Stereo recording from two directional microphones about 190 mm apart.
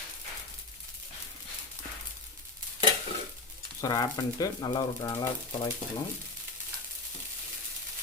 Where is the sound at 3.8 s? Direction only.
20° left (ahead or behind).